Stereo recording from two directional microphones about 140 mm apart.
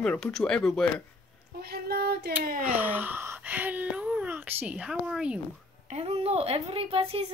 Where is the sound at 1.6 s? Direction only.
90° right.